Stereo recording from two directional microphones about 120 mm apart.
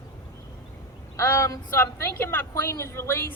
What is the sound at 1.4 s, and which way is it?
Speech, 25° left (ahead or behind).